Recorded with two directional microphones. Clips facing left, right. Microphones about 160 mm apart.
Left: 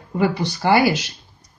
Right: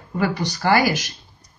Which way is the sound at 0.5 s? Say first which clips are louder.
Left 1 dB; 20° left (ahead or behind).